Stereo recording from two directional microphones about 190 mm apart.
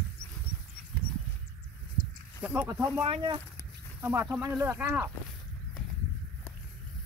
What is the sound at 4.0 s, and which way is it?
Speech, 10° right (ahead or behind).